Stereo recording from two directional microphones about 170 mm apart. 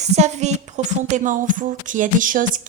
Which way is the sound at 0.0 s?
40° right (ahead or behind).